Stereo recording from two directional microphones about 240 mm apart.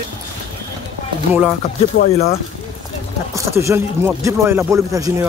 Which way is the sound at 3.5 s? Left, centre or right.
Centre.